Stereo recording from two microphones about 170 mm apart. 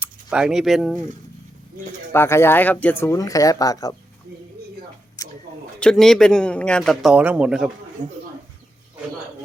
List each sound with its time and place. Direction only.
0.0 s speech: 5° right (ahead or behind)
2.1 s speech: 15° left (ahead or behind)
5.2 s a sound: 20° left (ahead or behind)
5.8 s a man's voice: 5° left (ahead or behind)
8.0 s speech: 25° right (ahead or behind)